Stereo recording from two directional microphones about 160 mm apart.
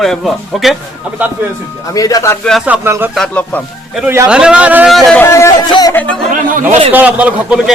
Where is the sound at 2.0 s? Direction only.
20° left (ahead or behind).